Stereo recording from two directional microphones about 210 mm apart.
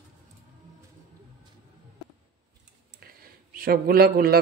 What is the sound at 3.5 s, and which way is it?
Speech, 45° right (ahead or behind).